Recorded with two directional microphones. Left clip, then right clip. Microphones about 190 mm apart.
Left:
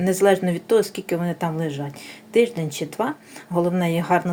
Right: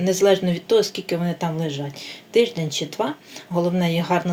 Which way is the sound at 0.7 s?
40° left (ahead or behind).